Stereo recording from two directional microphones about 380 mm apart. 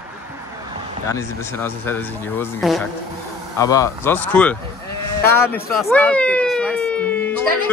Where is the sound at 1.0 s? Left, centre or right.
Centre.